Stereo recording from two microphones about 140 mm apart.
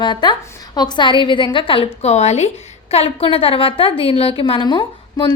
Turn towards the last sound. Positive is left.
turn(degrees=35)  # may be behind; listen again after turning